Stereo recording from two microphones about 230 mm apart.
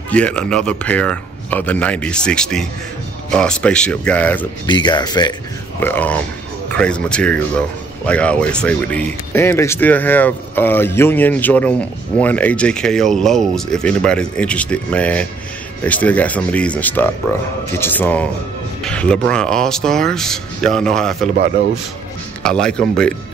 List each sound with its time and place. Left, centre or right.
0.1 s speech: centre
4.6 s speech: centre
5.8 s speech: centre
22.4 s speech: centre